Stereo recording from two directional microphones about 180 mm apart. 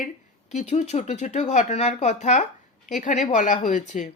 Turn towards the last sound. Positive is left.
turn(degrees=45)  # may be behind; listen again after turning